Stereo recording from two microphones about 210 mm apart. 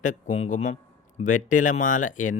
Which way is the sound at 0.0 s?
35° left (ahead or behind).